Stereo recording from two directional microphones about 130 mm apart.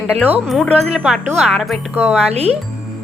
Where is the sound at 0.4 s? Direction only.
Centre (ahead or behind).